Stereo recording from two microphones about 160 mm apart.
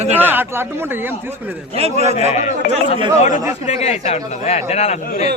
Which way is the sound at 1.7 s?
40° right (ahead or behind).